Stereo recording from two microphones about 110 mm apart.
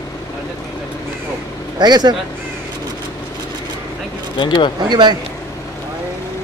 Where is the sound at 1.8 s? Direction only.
40° right (ahead or behind).